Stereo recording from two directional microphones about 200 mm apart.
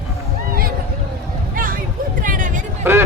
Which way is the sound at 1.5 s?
45° right (ahead or behind).